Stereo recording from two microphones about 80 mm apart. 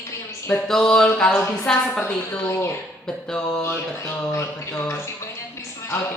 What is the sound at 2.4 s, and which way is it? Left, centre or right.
Speech, left.